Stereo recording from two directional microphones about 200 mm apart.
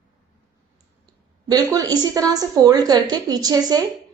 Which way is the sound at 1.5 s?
20° right (ahead or behind).